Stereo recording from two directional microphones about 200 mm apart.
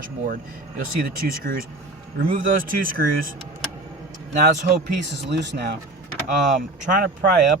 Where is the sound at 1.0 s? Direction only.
45° right (ahead or behind).